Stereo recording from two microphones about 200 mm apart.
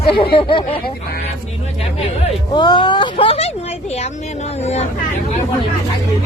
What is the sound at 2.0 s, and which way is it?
Speech, 30° left (ahead or behind).